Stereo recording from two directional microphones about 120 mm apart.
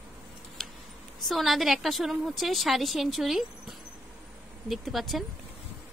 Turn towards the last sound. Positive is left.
turn(degrees=0)  # may be behind; listen again after turning